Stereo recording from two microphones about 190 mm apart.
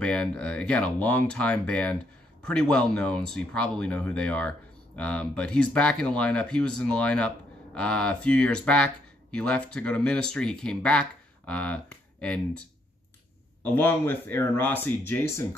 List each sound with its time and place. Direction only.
0.0 s speech: 5° left (ahead or behind)